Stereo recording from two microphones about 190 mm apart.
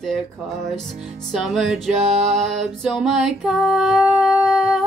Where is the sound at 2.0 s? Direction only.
35° right (ahead or behind).